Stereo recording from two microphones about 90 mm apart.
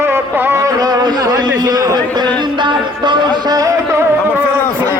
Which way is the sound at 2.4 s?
60° right (ahead or behind).